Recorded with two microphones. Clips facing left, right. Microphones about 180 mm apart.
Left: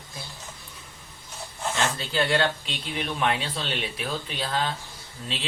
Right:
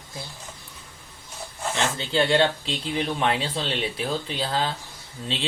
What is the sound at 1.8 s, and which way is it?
Speech, 25° right (ahead or behind).